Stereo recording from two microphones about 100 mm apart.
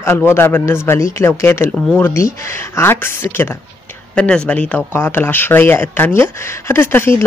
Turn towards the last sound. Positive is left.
turn(degrees=25)  # may be behind; listen again after turning